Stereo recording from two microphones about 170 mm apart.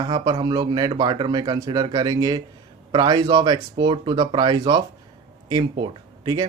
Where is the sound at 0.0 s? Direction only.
25° right (ahead or behind).